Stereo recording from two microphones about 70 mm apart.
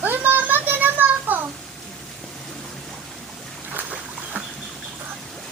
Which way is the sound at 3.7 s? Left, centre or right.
Right.